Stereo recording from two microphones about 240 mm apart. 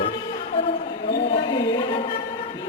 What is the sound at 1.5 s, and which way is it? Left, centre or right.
Speech, centre.